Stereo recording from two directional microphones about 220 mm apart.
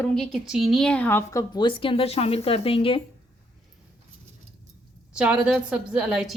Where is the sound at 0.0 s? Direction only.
5° left (ahead or behind); by 3.0 s 25° left (ahead or behind).